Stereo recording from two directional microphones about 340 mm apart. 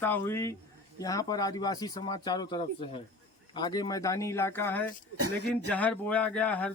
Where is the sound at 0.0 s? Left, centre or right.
Centre.